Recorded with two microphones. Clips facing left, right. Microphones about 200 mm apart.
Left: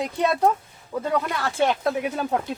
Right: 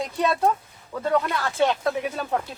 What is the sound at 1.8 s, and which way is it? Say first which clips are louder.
Speech: left 2 dB; 15° left (ahead or behind).